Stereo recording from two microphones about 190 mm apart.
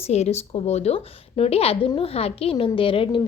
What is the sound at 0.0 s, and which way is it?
A woman's voice, 35° left (ahead or behind).